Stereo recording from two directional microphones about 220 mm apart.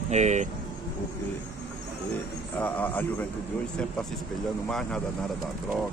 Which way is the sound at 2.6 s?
10° left (ahead or behind).